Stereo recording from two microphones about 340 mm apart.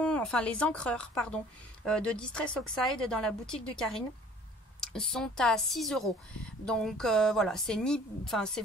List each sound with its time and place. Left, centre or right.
0.0 s speech: centre